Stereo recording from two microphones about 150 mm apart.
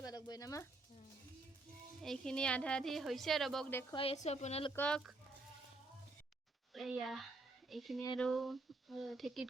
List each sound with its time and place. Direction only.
0.0 s a sound: 25° left (ahead or behind)
2.0 s a woman's voice: 5° left (ahead or behind)
3.9 s a woman's voice: 40° left (ahead or behind)
4.7 s a woman's voice: 10° left (ahead or behind)
6.7 s a woman's voice: centre (ahead or behind)